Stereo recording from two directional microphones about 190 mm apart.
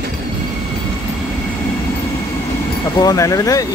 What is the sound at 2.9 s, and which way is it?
Speech, 20° left (ahead or behind).